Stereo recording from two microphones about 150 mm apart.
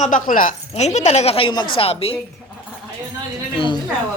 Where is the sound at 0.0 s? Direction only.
60° left (ahead or behind).